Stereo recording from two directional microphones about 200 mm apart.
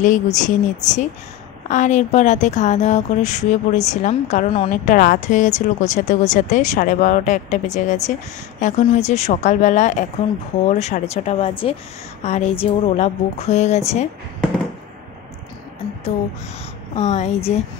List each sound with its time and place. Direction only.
0.0 s a woman's voice: 40° left (ahead or behind)
16.9 s a woman's voice: 35° left (ahead or behind)